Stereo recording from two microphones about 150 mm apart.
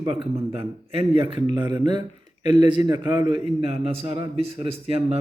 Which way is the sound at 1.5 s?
30° right (ahead or behind).